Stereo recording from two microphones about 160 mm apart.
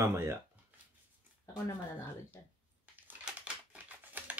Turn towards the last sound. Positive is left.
turn(degrees=-10)  # may be behind; listen again after turning